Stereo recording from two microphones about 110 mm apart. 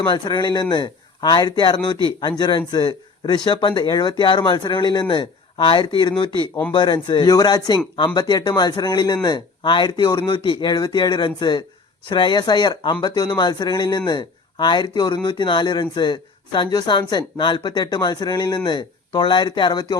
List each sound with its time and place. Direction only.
0.0 s speech: 45° left (ahead or behind)